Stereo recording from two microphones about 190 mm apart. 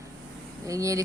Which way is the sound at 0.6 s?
15° right (ahead or behind).